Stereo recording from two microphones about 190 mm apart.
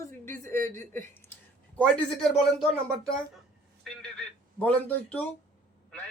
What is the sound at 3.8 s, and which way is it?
Speech, 5° left (ahead or behind).